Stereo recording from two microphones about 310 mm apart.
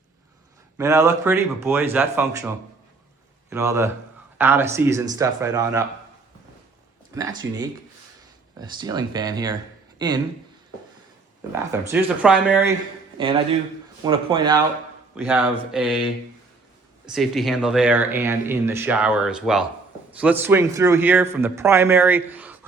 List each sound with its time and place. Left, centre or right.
0.8 s a man's voice: centre
3.5 s a man's voice: centre
7.1 s a man's voice: centre
8.8 s a man's voice: centre
11.5 s a man's voice: centre
13.2 s a man's voice: centre
15.3 s speech: centre
17.1 s a man's voice: centre